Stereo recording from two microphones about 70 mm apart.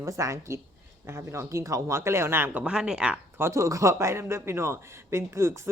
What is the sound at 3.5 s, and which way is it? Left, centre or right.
Speech, right.